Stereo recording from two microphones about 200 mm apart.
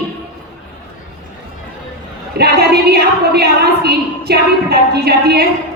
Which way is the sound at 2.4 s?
55° right (ahead or behind).